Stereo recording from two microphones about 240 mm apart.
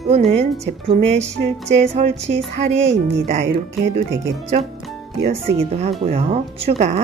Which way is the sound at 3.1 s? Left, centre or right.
Right.